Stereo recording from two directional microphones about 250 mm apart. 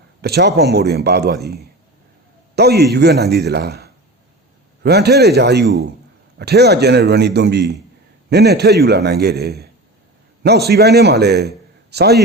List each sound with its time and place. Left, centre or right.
0.2 s a man's voice: right